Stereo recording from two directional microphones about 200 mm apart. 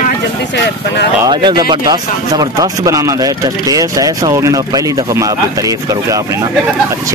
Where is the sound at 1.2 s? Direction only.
20° right (ahead or behind).